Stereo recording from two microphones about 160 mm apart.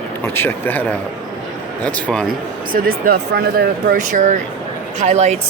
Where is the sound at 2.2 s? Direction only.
65° right (ahead or behind).